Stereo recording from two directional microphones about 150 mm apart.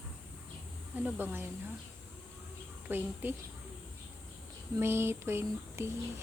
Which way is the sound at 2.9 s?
15° right (ahead or behind).